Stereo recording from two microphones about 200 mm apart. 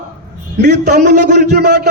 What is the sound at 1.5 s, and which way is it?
Speech, 55° right (ahead or behind).